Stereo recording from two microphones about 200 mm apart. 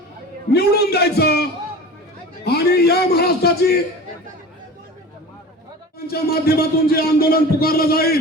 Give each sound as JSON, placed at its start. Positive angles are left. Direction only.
{"t": 0.5, "sound": "a man's voice", "side_deg": 55}
{"t": 2.4, "sound": "a sound", "side_deg": 50}
{"t": 6.1, "sound": "a man's voice", "side_deg": 50}